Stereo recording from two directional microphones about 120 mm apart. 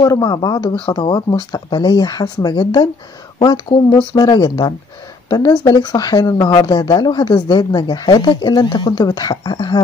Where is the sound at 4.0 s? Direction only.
40° left (ahead or behind).